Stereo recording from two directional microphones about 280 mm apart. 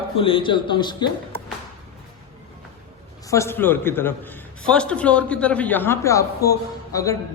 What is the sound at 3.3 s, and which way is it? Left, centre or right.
A man's voice, centre.